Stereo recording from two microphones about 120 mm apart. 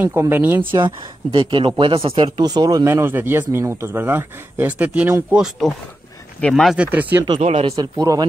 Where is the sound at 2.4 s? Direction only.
30° right (ahead or behind); by 6.9 s centre (ahead or behind).